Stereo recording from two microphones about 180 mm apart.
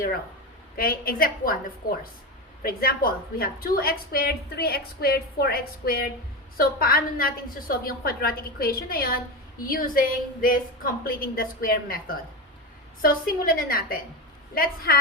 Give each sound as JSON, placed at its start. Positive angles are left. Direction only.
{"t": 0.8, "sound": "a woman's voice", "side_deg": 55}
{"t": 2.6, "sound": "a woman's voice", "side_deg": 55}